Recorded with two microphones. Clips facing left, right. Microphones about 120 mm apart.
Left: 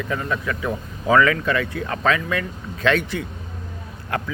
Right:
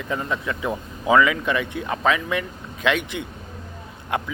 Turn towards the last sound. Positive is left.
turn(degrees=-20)  # may be behind; listen again after turning